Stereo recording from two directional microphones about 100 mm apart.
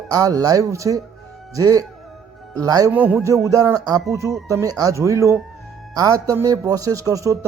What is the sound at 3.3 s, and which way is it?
A man's voice, 30° right (ahead or behind).